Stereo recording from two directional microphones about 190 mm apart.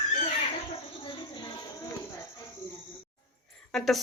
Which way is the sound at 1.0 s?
25° left (ahead or behind).